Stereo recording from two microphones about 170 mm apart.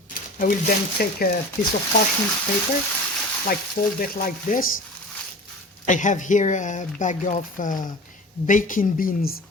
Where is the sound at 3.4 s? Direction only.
60° left (ahead or behind).